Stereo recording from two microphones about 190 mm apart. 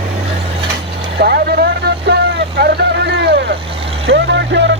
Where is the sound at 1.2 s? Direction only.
55° right (ahead or behind).